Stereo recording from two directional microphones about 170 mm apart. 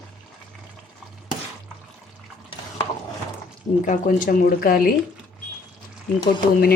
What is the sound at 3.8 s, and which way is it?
Speech, 50° left (ahead or behind).